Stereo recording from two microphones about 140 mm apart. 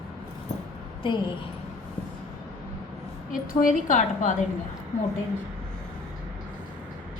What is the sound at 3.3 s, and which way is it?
A woman's voice, 70° left (ahead or behind).